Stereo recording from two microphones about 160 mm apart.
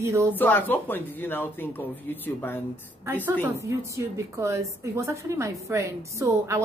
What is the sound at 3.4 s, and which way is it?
A woman's voice, 20° right (ahead or behind).